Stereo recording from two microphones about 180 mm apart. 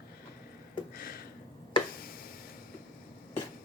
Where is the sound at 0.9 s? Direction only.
55° left (ahead or behind).